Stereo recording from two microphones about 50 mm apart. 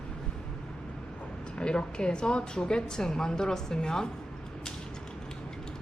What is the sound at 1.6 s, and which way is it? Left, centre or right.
A woman's voice, centre.